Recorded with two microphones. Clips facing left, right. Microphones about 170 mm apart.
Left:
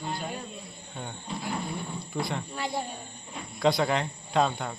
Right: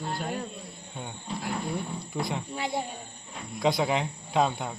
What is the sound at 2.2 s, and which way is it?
Speech, 20° right (ahead or behind).